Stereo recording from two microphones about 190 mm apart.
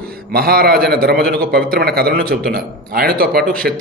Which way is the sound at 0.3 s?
55° right (ahead or behind).